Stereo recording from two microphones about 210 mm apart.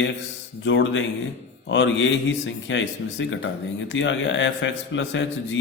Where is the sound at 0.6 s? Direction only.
60° left (ahead or behind).